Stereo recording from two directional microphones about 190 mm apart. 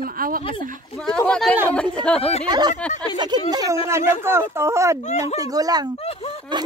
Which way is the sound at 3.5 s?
20° right (ahead or behind).